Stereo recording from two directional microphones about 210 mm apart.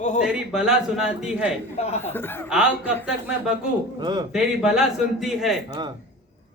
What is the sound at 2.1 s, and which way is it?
Speech, 10° left (ahead or behind).